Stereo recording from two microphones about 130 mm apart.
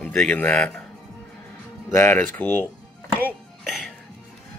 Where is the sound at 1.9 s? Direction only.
20° left (ahead or behind).